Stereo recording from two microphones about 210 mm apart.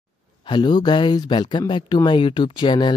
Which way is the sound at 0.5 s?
20° left (ahead or behind).